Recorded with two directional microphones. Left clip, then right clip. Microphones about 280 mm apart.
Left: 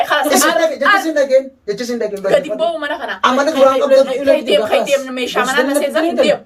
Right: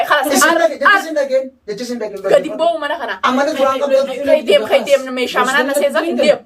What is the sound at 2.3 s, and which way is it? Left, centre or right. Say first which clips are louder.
Speech: right 2 dB; centre.